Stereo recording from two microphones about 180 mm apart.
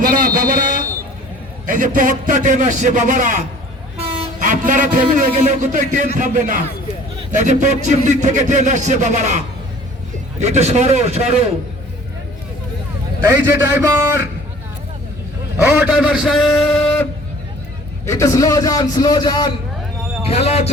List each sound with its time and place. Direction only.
0.0 s a sound: 50° right (ahead or behind)
1.6 s a man's voice: 45° right (ahead or behind)
10.4 s a man's voice: 40° right (ahead or behind)
13.2 s a man's voice: 15° right (ahead or behind)
15.6 s a man's voice: 10° right (ahead or behind); by 17.1 s 5° left (ahead or behind)
18.0 s a man's voice: 15° left (ahead or behind)
20.2 s speech: 35° left (ahead or behind)